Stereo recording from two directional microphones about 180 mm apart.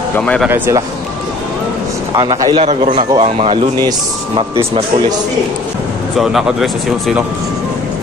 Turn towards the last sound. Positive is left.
turn(degrees=0)  # may be behind; listen again after turning